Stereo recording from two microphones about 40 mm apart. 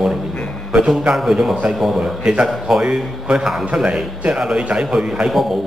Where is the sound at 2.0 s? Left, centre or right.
Centre.